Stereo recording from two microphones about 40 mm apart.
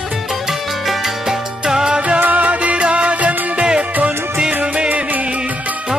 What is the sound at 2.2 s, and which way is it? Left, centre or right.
Music, right.